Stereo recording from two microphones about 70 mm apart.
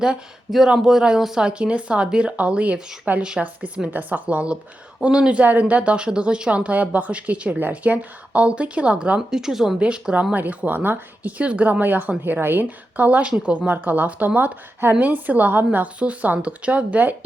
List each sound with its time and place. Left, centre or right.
0.0 s speech: centre
9.3 s speech: centre; by 17.2 s right